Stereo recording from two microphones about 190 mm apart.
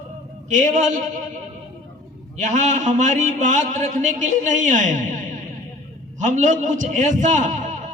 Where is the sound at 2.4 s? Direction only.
40° right (ahead or behind).